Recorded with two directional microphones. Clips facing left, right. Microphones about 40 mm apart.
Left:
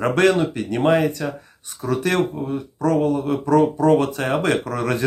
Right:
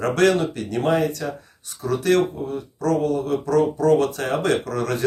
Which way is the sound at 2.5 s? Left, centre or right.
Left.